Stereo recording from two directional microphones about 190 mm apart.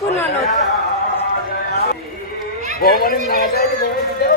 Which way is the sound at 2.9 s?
50° left (ahead or behind).